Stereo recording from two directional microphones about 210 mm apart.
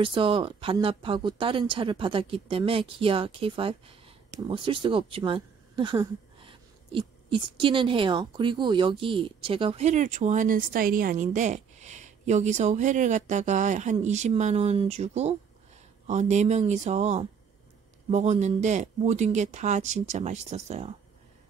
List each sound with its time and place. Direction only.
0.0 s speech: 25° right (ahead or behind)